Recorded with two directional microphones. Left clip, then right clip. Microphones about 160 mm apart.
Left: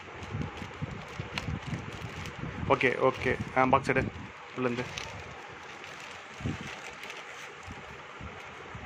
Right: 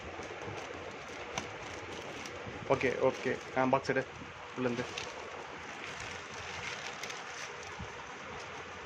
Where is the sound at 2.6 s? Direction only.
20° left (ahead or behind).